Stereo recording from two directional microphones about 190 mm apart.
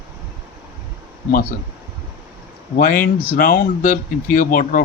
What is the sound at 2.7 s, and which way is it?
Speech, 45° left (ahead or behind).